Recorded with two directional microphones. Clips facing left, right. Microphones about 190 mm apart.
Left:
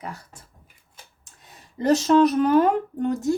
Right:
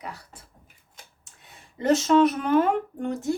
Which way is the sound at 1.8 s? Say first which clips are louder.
Left 2 dB; 40° left (ahead or behind).